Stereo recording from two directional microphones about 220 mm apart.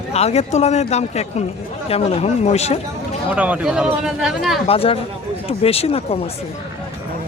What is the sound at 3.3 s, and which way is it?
Speech, 5° right (ahead or behind).